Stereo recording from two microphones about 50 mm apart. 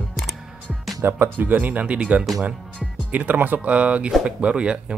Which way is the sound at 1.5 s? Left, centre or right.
Right.